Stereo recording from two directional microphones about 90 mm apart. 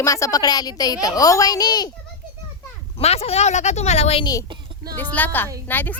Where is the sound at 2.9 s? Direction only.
90° left.